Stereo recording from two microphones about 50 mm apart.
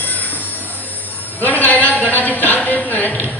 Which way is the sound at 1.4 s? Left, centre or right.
Left.